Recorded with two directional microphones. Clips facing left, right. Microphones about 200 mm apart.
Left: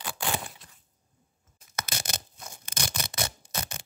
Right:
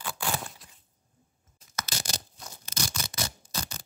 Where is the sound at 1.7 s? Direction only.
55° left (ahead or behind).